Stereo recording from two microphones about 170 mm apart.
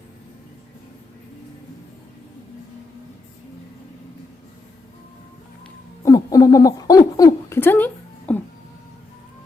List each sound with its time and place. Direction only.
6.1 s owl: 20° left (ahead or behind)
8.3 s music: 10° left (ahead or behind)